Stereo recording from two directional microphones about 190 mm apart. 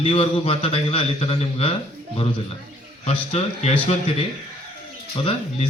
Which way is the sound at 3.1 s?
35° left (ahead or behind).